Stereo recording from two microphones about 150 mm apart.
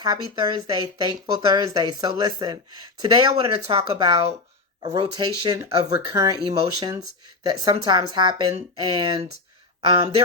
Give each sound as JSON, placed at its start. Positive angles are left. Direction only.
{"t": 0.0, "sound": "speech", "side_deg": -25}